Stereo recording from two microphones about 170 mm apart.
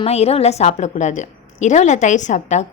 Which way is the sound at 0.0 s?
35° left (ahead or behind).